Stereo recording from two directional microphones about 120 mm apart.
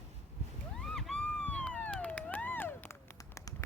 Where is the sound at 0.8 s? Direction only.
5° left (ahead or behind).